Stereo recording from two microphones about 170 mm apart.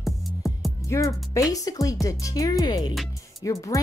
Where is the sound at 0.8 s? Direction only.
20° left (ahead or behind).